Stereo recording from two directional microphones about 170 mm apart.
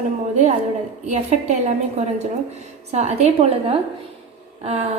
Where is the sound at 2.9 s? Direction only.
40° right (ahead or behind).